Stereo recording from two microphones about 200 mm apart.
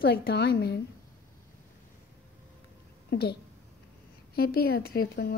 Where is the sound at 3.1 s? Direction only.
50° left (ahead or behind).